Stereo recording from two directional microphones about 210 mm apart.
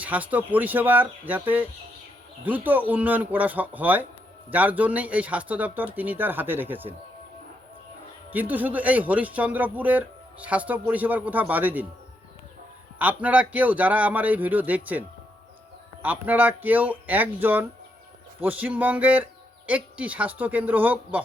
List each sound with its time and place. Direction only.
0.0 s speech: 5° right (ahead or behind)
8.3 s speech: 10° right (ahead or behind)
13.0 s speech: 5° right (ahead or behind)